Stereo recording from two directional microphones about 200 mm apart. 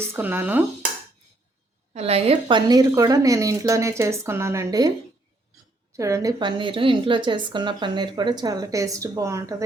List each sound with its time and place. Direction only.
0.0 s a woman's voice: 10° right (ahead or behind)
1.9 s a woman's voice: 30° right (ahead or behind); by 4.9 s 15° right (ahead or behind)
5.9 s a woman's voice: 15° right (ahead or behind)